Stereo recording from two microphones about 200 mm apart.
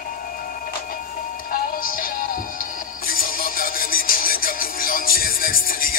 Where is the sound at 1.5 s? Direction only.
45° left (ahead or behind).